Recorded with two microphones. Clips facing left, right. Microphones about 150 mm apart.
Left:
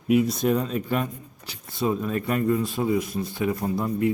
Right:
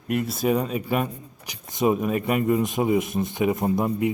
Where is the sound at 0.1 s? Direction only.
Centre (ahead or behind).